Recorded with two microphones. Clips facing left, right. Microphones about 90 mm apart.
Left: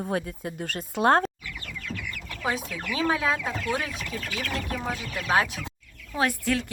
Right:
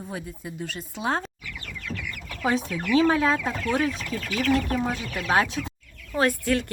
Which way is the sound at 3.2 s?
10° left (ahead or behind).